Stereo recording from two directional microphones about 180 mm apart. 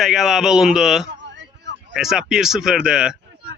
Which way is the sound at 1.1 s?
80° right.